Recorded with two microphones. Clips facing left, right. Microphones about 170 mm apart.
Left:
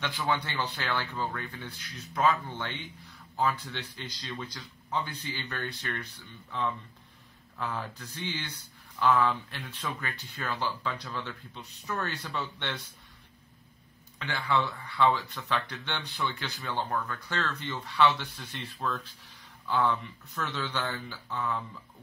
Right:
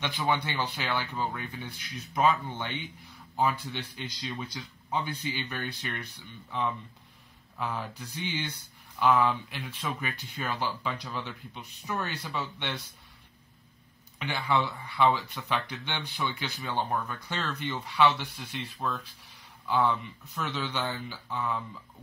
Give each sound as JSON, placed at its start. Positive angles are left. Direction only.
{"t": 0.0, "sound": "speech", "side_deg": -20}
{"t": 7.5, "sound": "speech", "side_deg": -15}
{"t": 9.9, "sound": "speech", "side_deg": -15}
{"t": 14.1, "sound": "speech", "side_deg": -15}
{"t": 20.3, "sound": "speech", "side_deg": -15}